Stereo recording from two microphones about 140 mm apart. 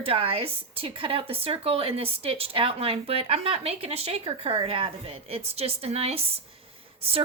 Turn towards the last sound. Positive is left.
turn(degrees=-45)  # may be behind; listen again after turning